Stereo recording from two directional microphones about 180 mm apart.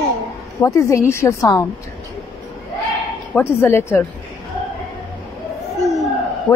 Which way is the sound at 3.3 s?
15° left (ahead or behind).